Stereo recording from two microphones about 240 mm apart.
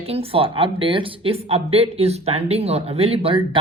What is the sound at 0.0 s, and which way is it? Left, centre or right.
A woman's voice, right.